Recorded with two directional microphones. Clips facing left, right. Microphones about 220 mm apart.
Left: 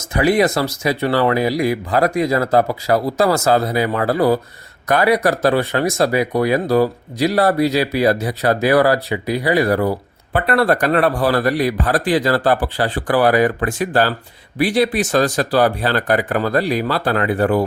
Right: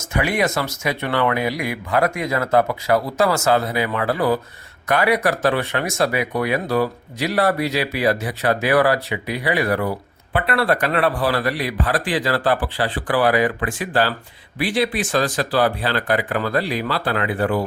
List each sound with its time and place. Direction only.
0.0 s speech: 35° left (ahead or behind)